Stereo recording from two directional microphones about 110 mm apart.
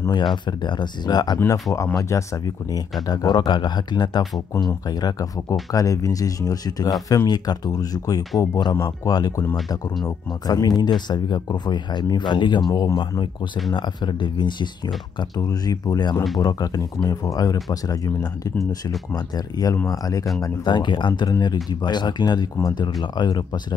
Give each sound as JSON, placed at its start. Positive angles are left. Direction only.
{"t": 0.1, "sound": "speech", "side_deg": 45}
{"t": 8.7, "sound": "speech", "side_deg": 25}
{"t": 20.6, "sound": "speech", "side_deg": 45}